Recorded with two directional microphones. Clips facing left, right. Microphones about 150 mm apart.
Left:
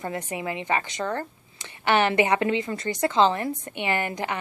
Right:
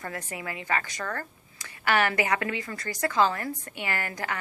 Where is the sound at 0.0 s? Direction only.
20° left (ahead or behind).